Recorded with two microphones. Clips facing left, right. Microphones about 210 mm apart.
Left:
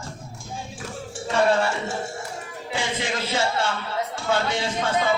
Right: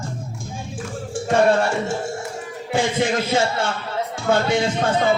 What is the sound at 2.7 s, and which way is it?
A man's voice, 50° right (ahead or behind).